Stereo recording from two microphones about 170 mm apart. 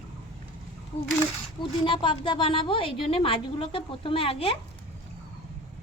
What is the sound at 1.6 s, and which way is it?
A woman's voice, 30° left (ahead or behind).